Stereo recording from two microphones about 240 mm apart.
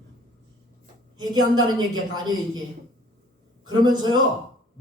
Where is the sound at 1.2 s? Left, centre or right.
Centre.